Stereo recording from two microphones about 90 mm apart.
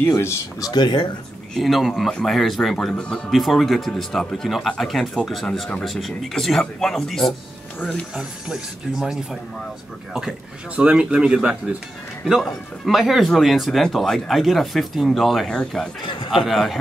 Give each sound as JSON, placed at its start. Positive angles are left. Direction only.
{"t": 0.1, "sound": "speech", "side_deg": 35}
{"t": 0.7, "sound": "speech", "side_deg": 55}
{"t": 1.5, "sound": "speech", "side_deg": 0}
{"t": 3.3, "sound": "speech", "side_deg": 0}
{"t": 8.1, "sound": "speech", "side_deg": -10}
{"t": 10.8, "sound": "speech", "side_deg": -10}